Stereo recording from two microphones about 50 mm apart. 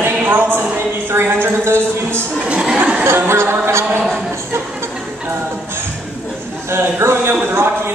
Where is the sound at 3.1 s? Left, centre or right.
Right.